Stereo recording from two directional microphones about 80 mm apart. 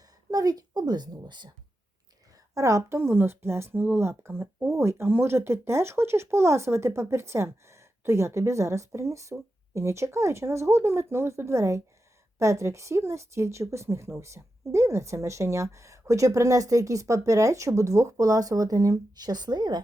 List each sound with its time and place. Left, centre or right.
0.3 s a woman's voice: right
2.6 s a woman's voice: right